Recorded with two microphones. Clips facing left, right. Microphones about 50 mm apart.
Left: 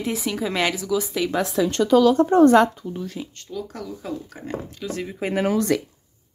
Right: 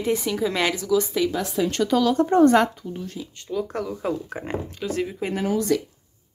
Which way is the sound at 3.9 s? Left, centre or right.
Right.